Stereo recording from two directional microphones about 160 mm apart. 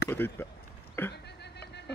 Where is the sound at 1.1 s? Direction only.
90° left.